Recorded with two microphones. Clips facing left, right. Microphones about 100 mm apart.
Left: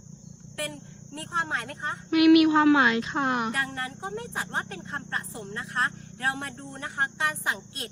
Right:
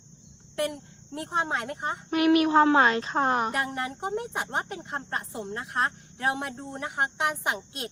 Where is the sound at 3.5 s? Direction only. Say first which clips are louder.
Right 2 dB; 20° right (ahead or behind).